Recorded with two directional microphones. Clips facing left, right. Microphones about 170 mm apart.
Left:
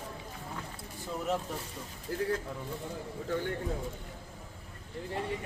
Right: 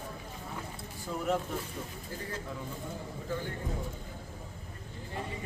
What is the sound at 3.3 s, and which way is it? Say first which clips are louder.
Speech: left 3 dB; 70° left (ahead or behind).